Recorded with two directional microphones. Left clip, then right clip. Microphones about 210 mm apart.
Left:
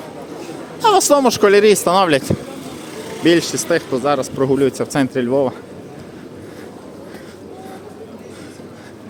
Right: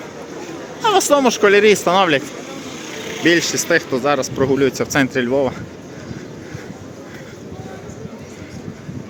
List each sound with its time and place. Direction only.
0.8 s speech: 20° left (ahead or behind)
3.2 s speech: 10° left (ahead or behind)